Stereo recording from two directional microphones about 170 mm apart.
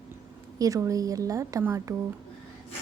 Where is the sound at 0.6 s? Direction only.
20° right (ahead or behind).